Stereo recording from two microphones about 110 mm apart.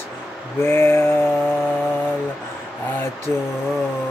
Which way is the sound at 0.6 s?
20° left (ahead or behind).